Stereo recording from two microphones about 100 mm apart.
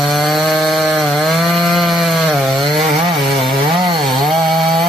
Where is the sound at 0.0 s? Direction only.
Centre (ahead or behind).